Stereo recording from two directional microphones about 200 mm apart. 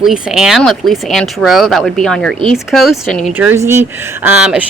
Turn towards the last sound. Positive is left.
turn(degrees=-5)  # may be behind; listen again after turning